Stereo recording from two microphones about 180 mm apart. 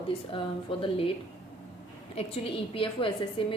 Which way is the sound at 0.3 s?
30° left (ahead or behind).